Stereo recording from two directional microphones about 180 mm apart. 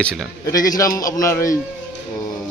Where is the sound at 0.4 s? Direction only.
20° left (ahead or behind).